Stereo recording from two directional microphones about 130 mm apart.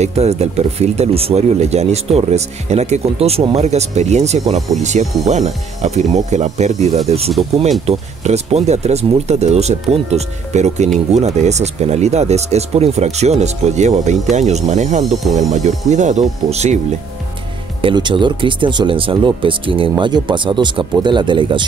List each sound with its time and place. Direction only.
0.0 s speech: 55° right (ahead or behind)
17.8 s speech: 40° right (ahead or behind)